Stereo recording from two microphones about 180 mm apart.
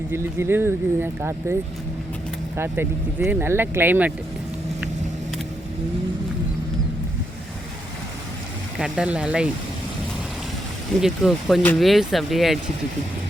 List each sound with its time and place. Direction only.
0.1 s speech: 15° right (ahead or behind)
2.6 s speech: 15° right (ahead or behind)
8.8 s speech: 5° right (ahead or behind)
11.0 s speech: 5° right (ahead or behind)